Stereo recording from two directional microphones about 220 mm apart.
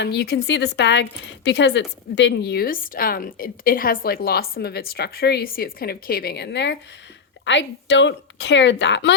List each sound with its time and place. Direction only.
0.0 s speech: 45° left (ahead or behind)